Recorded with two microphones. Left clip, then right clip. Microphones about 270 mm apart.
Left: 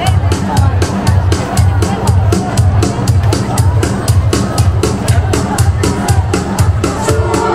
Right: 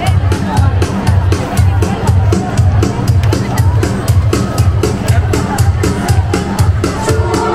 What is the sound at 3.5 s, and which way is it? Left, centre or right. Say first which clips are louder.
Music: left 1 dB; centre.